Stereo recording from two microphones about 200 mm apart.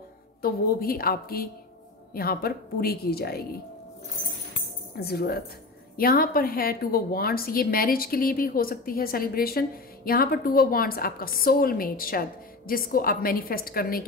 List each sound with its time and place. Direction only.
0.4 s a woman's voice: 50° left (ahead or behind)
4.9 s a woman's voice: 50° left (ahead or behind)